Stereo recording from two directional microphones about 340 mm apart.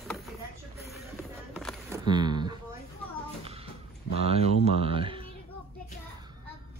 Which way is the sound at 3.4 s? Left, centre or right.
Centre.